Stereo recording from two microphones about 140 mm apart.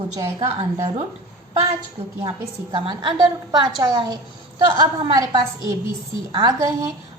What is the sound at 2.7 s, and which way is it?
A woman's voice, 35° right (ahead or behind).